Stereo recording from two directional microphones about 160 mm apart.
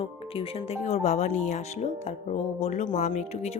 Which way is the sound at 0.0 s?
35° left (ahead or behind).